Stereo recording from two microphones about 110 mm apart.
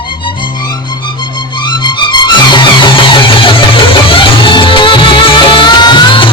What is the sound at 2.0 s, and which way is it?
Music, 45° left (ahead or behind).